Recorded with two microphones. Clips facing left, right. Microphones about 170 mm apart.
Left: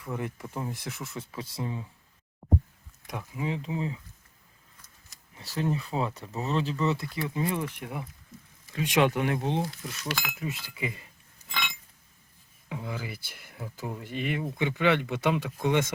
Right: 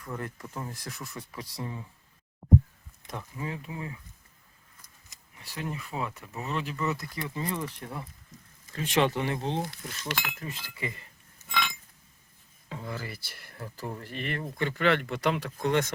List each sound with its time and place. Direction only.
0.0 s speech: 10° left (ahead or behind)
3.1 s speech: 10° left (ahead or behind)
5.4 s speech: 30° left (ahead or behind)
7.2 s speech: 10° left (ahead or behind)
11.4 s chink: 15° left (ahead or behind)
12.6 s speech: 10° left (ahead or behind)
15.0 s speech: 5° left (ahead or behind)